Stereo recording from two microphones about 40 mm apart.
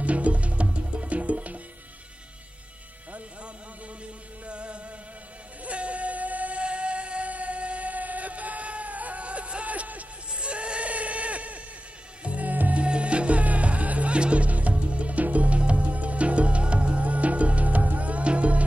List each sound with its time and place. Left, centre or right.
0.0 s music: right
4.5 s music: right
10.3 s a sound: right
12.2 s music: right
12.8 s music: right